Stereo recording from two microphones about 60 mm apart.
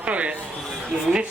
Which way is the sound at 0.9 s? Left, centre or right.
Centre.